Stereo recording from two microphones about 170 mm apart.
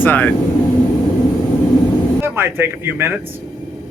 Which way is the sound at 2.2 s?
15° right (ahead or behind).